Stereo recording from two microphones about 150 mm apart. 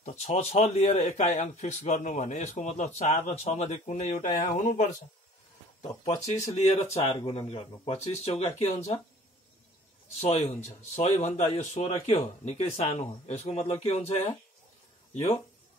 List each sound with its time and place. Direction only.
0.0 s a man's voice: 50° left (ahead or behind)
10.2 s a man's voice: 45° left (ahead or behind)